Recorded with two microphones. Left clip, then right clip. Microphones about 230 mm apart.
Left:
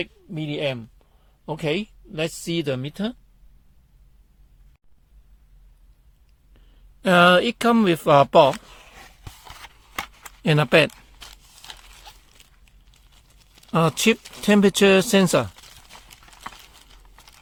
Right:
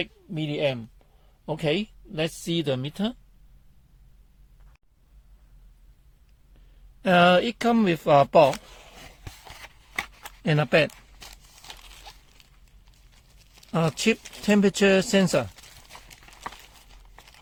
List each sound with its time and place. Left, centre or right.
0.0 s speech: left
7.0 s speech: left
9.2 s a sound: left
10.4 s speech: left
13.1 s tearing: centre
13.7 s speech: left
15.9 s clip-clop: centre